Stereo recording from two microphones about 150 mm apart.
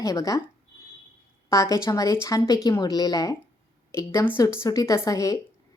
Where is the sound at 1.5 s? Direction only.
20° left (ahead or behind).